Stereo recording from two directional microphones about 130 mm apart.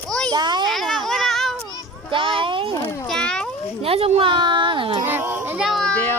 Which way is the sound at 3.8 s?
50° right (ahead or behind).